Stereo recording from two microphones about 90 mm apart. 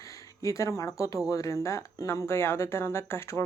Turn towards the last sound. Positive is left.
turn(degrees=30)  # may be behind; listen again after turning